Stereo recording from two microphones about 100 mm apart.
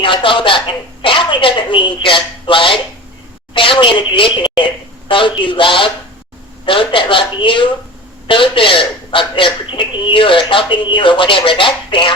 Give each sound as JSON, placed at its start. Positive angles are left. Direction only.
{"t": 0.0, "sound": "a man's voice", "side_deg": 60}